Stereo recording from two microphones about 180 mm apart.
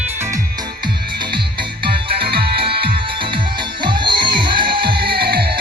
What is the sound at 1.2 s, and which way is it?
Music, 25° right (ahead or behind).